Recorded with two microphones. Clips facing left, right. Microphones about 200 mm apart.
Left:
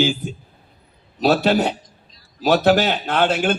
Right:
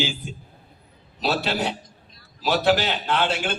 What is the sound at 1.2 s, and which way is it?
A man's voice, 50° left (ahead or behind).